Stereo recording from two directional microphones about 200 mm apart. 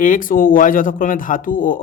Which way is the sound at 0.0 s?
40° left (ahead or behind).